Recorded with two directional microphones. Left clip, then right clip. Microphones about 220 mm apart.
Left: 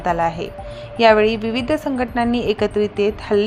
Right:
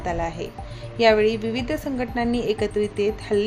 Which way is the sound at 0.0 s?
15° left (ahead or behind).